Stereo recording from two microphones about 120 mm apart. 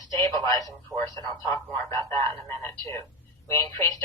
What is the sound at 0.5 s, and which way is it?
A man's voice, 30° left (ahead or behind).